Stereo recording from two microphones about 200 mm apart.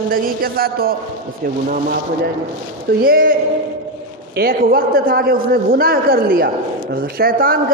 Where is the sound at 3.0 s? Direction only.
45° right (ahead or behind).